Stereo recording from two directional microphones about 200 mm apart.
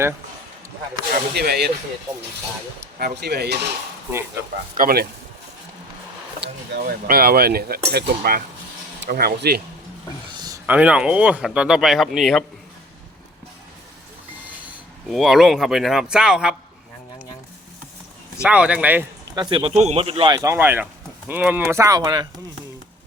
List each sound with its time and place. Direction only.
1.1 s speech: 50° right (ahead or behind)
3.0 s speech: 55° right (ahead or behind)
4.8 s speech: 45° right (ahead or behind)
6.4 s speech: 50° right (ahead or behind)
10.3 s a sound: 20° right (ahead or behind)
10.7 s speech: 5° right (ahead or behind)
15.1 s speech: centre (ahead or behind)
18.4 s speech: 5° right (ahead or behind)
19.4 s speech: 25° right (ahead or behind)